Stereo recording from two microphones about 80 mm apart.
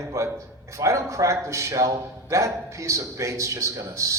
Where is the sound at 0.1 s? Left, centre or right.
Right.